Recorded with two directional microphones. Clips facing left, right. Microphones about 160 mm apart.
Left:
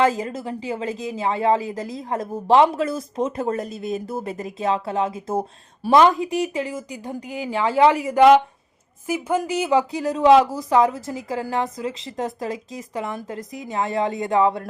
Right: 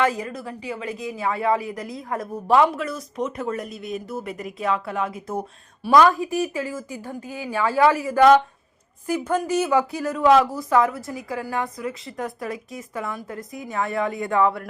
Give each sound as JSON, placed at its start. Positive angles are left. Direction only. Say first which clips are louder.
{"t": 0.0, "sound": "a woman's voice", "louder": "left 3 dB", "side_deg": 25}